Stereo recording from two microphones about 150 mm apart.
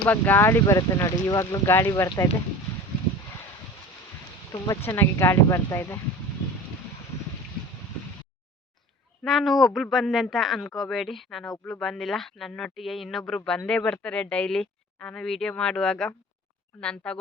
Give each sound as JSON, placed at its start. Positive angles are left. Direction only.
{"t": 0.0, "sound": "speech", "side_deg": 10}
{"t": 4.5, "sound": "speech", "side_deg": 25}
{"t": 4.8, "sound": "speech", "side_deg": 15}
{"t": 9.2, "sound": "speech", "side_deg": 0}